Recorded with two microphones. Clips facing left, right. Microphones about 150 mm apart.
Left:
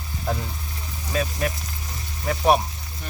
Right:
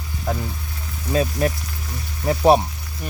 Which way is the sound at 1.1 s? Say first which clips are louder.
Right 5 dB; 30° right (ahead or behind).